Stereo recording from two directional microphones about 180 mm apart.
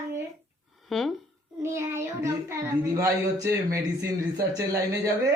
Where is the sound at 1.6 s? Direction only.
15° right (ahead or behind).